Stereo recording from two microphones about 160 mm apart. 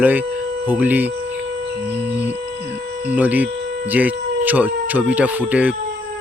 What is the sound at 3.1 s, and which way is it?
Speech, 10° right (ahead or behind).